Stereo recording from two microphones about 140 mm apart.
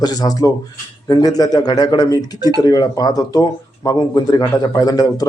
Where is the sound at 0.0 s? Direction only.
25° left (ahead or behind).